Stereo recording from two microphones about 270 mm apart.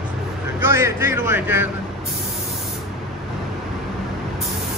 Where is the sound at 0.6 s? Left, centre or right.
Centre.